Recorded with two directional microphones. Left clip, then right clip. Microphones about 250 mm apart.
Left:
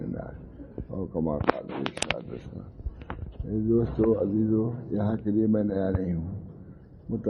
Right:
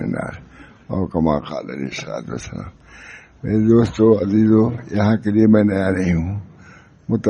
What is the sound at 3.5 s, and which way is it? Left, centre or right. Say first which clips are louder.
Speech: right 10 dB; right.